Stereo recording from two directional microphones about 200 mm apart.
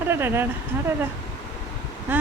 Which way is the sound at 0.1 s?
10° right (ahead or behind).